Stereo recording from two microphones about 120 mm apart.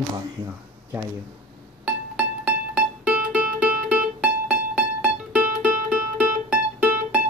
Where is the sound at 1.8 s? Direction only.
10° right (ahead or behind).